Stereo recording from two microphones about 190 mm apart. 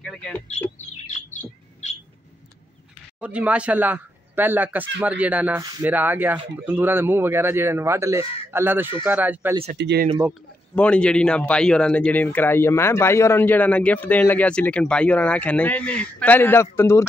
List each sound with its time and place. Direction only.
0.0 s bird: 5° left (ahead or behind)
3.2 s speech: 5° right (ahead or behind)
9.8 s speech: 65° right (ahead or behind)
10.7 s speech: 5° left (ahead or behind)